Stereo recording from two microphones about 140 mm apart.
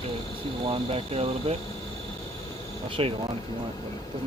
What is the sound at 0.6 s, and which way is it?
Speech, 40° right (ahead or behind).